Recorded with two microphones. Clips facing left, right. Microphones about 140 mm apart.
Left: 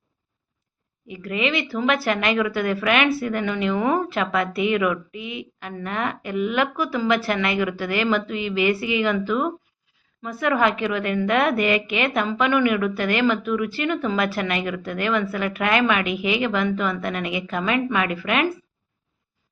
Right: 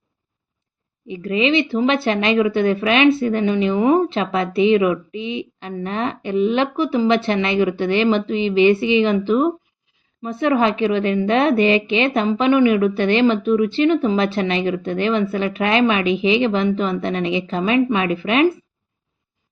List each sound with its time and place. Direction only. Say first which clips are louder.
1.0 s speech: right 6 dB; 25° right (ahead or behind)